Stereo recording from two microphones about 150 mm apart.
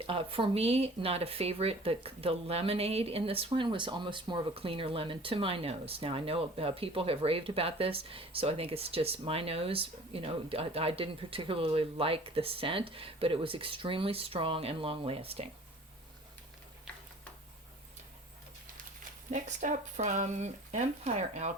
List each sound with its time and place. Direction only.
0.0 s speech: 40° right (ahead or behind)
19.3 s speech: 55° right (ahead or behind)